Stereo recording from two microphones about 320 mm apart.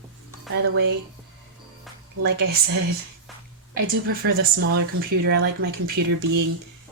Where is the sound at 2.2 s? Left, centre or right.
Right.